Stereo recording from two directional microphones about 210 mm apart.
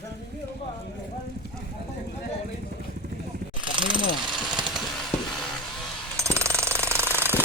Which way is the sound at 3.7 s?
20° right (ahead or behind).